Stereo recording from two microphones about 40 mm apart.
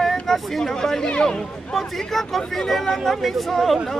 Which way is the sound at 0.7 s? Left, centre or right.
Centre.